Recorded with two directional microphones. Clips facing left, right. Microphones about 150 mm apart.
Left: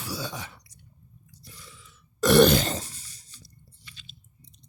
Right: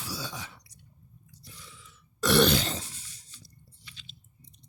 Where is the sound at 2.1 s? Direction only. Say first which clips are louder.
Left 5 dB; 45° left (ahead or behind).